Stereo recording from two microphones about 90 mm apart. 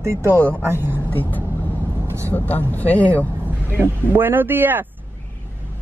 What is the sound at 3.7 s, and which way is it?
Speech, 25° right (ahead or behind).